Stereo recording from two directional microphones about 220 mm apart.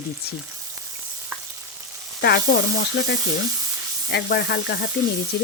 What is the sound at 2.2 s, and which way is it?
Speech, 45° left (ahead or behind).